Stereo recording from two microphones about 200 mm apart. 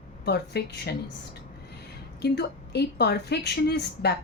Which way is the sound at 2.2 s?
55° left (ahead or behind).